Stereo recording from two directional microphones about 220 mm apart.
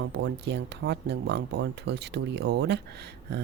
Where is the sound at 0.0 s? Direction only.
55° right (ahead or behind).